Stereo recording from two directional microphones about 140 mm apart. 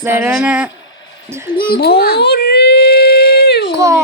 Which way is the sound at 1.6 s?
90° left.